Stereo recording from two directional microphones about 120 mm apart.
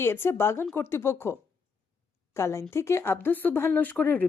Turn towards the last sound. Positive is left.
turn(degrees=15)  # may be behind; listen again after turning